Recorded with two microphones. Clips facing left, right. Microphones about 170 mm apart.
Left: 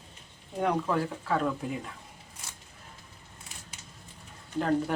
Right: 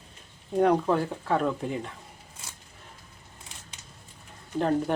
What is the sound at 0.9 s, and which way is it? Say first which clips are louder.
Speech: right 3 dB; 25° right (ahead or behind).